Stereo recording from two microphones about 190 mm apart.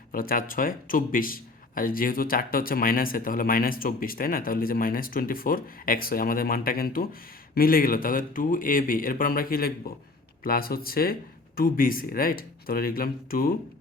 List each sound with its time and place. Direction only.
0.1 s a man's voice: 50° left (ahead or behind)